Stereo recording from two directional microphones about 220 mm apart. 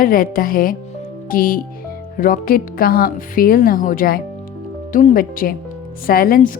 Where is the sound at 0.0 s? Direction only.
40° left (ahead or behind).